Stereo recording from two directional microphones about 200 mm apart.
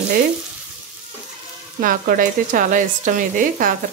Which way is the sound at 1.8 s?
45° right (ahead or behind).